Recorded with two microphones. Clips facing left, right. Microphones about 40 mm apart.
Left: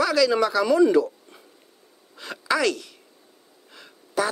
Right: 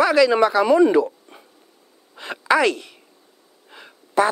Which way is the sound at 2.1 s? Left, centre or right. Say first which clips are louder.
Right 6 dB; right.